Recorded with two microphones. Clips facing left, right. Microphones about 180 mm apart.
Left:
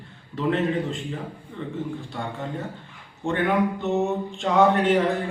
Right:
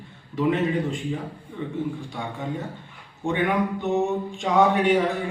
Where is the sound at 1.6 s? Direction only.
10° right (ahead or behind).